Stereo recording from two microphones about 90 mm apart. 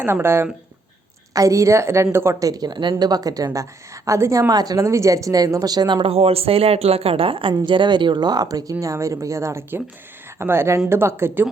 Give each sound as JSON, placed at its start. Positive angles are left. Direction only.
{"t": 0.0, "sound": "speech", "side_deg": -25}
{"t": 1.3, "sound": "a woman's voice", "side_deg": -40}
{"t": 6.0, "sound": "a woman's voice", "side_deg": -90}
{"t": 7.5, "sound": "speech", "side_deg": -60}